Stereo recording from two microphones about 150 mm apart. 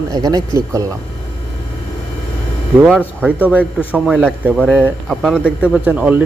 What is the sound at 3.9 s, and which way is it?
A man's voice, 5° right (ahead or behind).